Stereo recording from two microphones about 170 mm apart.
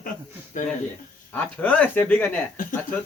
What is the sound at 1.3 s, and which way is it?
Speech, 10° left (ahead or behind).